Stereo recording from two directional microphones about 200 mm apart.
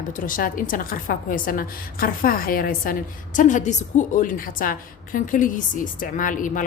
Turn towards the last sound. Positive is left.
turn(degrees=40)  # may be behind; listen again after turning